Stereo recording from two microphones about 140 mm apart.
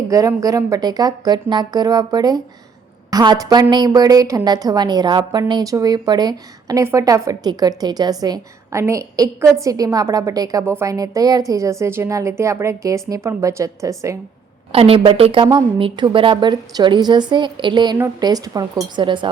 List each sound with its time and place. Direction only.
0.1 s a woman's voice: 25° right (ahead or behind)
14.7 s a woman's voice: 40° right (ahead or behind)